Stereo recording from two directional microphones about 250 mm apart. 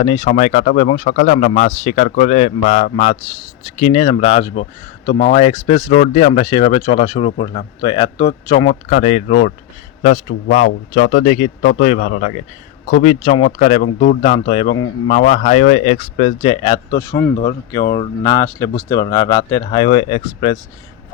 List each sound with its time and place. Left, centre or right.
0.0 s speech: left
15.1 s speech: left